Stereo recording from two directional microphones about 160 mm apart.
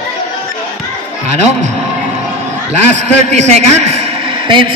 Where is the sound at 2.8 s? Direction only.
45° right (ahead or behind).